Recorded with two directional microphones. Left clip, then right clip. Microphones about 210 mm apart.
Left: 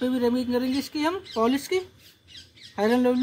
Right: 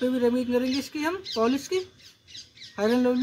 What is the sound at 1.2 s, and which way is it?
Speech, 20° left (ahead or behind).